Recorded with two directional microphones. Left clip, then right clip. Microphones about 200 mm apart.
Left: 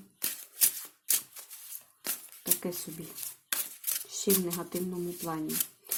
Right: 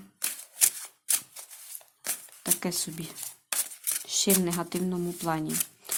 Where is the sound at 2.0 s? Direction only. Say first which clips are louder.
Right 3 dB; 15° right (ahead or behind).